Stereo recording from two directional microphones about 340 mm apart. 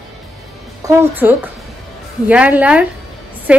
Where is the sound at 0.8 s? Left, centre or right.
Centre.